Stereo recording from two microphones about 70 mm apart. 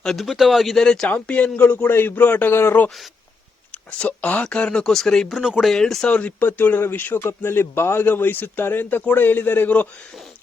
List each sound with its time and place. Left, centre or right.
0.0 s speech: centre
0.9 s a man's voice: centre; by 2.8 s left
3.7 s speech: centre
5.3 s speech: centre
6.4 s a man's voice: left